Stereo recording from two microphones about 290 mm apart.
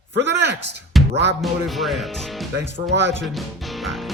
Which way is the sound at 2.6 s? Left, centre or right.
Right.